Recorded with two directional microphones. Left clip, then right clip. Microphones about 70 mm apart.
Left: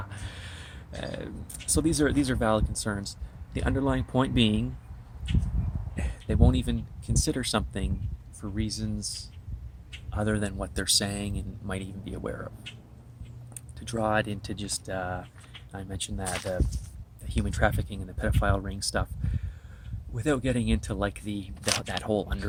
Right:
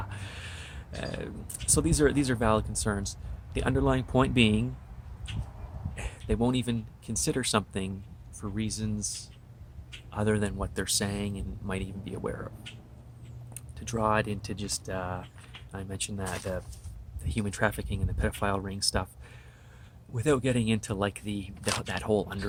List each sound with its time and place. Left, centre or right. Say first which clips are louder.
0.0 s speech: right 1 dB; right
6.0 s a sound: even; right
7.2 s speech: even; right
10.6 s speech: left 4 dB; centre
13.7 s speech: even; right
17.2 s speech: left 2 dB; right